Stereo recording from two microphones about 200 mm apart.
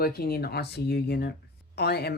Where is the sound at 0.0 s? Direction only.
50° left (ahead or behind).